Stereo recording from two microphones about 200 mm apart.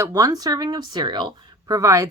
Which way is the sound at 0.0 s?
20° right (ahead or behind).